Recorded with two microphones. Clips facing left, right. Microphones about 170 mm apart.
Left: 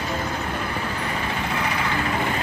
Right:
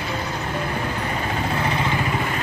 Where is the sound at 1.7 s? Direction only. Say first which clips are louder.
Right 2 dB; 20° right (ahead or behind).